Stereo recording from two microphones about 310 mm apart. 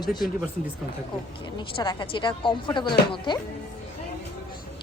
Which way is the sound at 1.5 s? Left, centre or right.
Centre.